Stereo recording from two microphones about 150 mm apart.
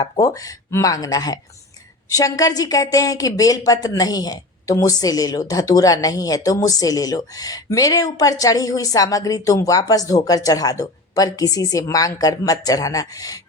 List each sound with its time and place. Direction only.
0.0 s a woman's voice: 25° left (ahead or behind)